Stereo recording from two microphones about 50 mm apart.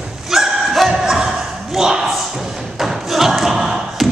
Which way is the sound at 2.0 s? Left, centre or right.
Centre.